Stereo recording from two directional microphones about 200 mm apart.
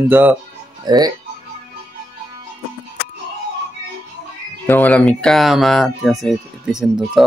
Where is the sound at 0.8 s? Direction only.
20° right (ahead or behind).